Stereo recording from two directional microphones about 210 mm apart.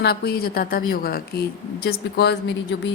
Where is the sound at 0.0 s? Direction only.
50° left (ahead or behind).